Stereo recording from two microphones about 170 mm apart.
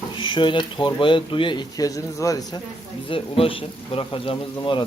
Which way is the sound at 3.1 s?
35° left (ahead or behind).